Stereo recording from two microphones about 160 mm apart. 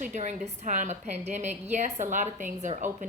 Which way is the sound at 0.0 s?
50° right (ahead or behind).